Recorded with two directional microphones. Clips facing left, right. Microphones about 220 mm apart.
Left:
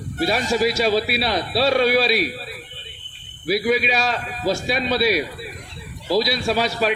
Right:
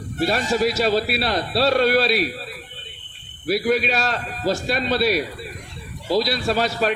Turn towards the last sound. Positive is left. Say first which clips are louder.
# even
turn(degrees=0)  # may be behind; listen again after turning